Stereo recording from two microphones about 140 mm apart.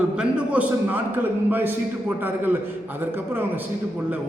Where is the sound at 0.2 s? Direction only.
10° right (ahead or behind).